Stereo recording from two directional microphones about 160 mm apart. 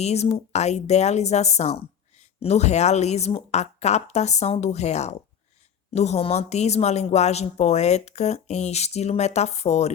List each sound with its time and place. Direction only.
0.0 s a woman's voice: 40° left (ahead or behind)